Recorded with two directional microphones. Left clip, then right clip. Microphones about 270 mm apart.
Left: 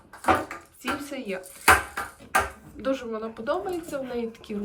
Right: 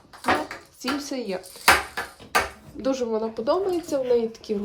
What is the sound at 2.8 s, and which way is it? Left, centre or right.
A woman's voice, centre.